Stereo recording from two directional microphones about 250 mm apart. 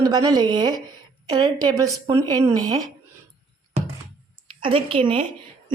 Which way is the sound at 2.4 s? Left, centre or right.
Centre.